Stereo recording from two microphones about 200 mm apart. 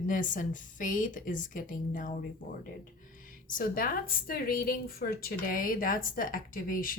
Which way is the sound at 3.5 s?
45° left (ahead or behind).